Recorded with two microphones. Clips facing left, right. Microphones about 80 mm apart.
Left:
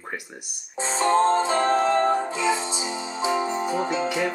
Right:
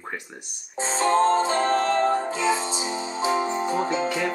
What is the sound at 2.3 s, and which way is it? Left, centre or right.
Music, right.